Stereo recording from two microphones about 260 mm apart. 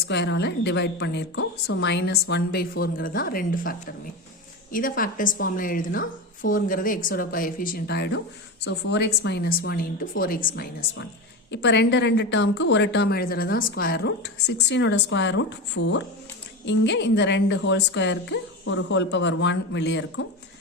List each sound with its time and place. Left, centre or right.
0.0 s a woman's voice: left